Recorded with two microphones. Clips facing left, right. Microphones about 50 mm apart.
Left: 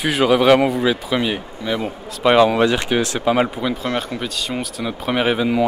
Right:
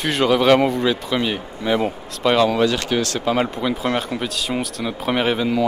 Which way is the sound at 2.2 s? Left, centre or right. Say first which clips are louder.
Left 3 dB; centre.